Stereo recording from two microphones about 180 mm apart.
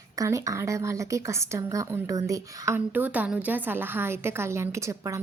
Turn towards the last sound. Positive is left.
turn(degrees=-15)  # may be behind; listen again after turning